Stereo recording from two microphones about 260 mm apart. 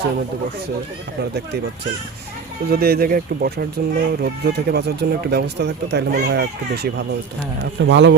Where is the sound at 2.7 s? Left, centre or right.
Right.